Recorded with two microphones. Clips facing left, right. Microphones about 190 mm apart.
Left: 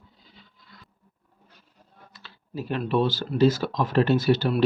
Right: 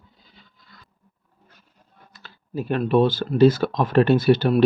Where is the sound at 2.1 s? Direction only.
50° right (ahead or behind).